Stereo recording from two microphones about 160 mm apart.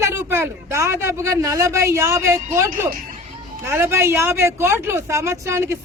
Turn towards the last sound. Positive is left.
turn(degrees=-15)  # may be behind; listen again after turning